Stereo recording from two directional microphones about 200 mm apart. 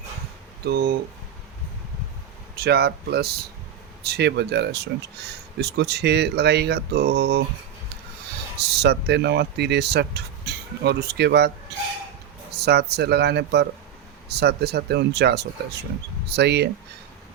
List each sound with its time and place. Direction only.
0.6 s speech: 50° right (ahead or behind)
2.6 s speech: 50° right (ahead or behind)
8.5 s speech: 55° right (ahead or behind)